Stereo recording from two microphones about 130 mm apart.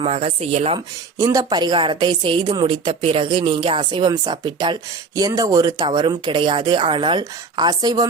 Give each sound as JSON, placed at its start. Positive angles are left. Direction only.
{"t": 0.0, "sound": "speech", "side_deg": -45}
{"t": 1.2, "sound": "a woman's voice", "side_deg": -30}
{"t": 5.8, "sound": "a woman's voice", "side_deg": -35}